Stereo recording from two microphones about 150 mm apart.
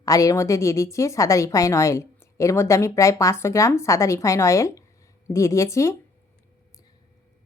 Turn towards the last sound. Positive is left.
turn(degrees=20)  # may be behind; listen again after turning